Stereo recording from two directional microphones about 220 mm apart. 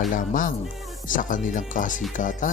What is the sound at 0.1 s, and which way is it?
Speech, 40° left (ahead or behind).